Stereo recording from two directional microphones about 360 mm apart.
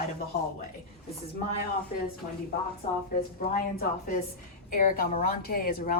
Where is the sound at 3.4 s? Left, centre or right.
Left.